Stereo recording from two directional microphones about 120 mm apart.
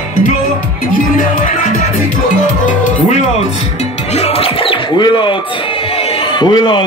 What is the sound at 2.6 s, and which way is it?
Music, 90° left.